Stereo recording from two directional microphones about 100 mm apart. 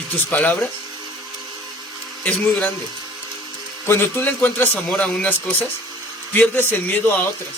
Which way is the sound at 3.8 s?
20° left (ahead or behind).